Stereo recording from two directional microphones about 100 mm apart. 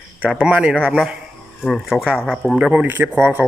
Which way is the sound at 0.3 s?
5° right (ahead or behind).